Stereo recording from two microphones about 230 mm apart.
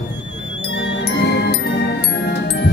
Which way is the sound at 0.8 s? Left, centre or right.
Left.